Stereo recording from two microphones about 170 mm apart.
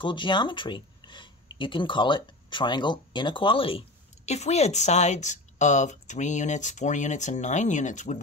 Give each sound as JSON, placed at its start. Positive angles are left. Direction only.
{"t": 0.0, "sound": "speech", "side_deg": 30}